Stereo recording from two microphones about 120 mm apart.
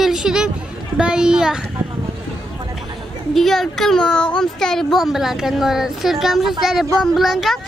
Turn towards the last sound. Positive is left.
turn(degrees=0)  # may be behind; listen again after turning